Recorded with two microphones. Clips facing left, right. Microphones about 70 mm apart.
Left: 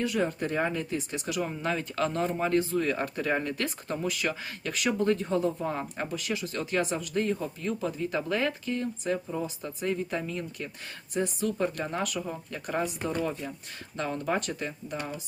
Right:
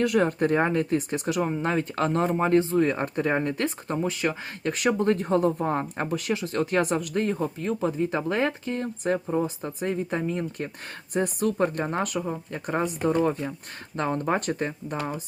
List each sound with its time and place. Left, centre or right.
0.0 s speech: right
11.1 s speech: right
13.9 s speech: right